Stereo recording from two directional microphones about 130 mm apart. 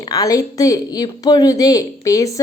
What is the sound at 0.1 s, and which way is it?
A woman's voice, 25° left (ahead or behind).